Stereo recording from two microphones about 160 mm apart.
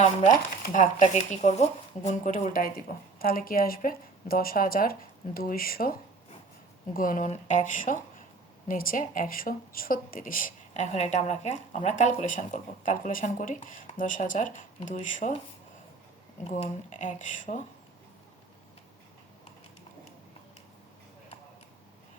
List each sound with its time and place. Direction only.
0.0 s speech: 50° left (ahead or behind)
16.4 s speech: 50° left (ahead or behind)